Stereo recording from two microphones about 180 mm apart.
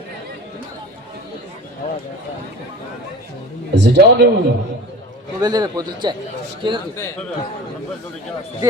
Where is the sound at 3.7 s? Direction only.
70° right (ahead or behind).